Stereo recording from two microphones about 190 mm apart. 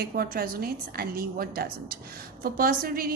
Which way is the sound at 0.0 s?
50° right (ahead or behind).